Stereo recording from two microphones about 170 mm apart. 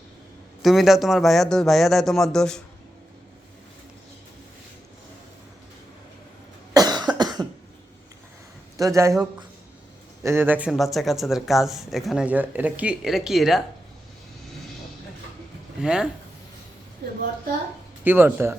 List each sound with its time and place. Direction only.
0.6 s speech: centre (ahead or behind)
6.7 s cough: 25° right (ahead or behind)
8.8 s speech: 20° right (ahead or behind)
10.2 s speech: 15° right (ahead or behind)
15.8 s speech: 5° right (ahead or behind)
18.0 s speech: 10° right (ahead or behind)